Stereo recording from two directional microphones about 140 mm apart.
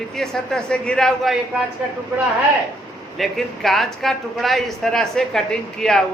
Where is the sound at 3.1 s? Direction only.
Centre (ahead or behind).